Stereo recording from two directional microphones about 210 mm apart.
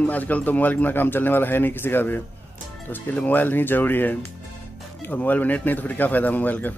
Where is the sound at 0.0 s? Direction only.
5° left (ahead or behind).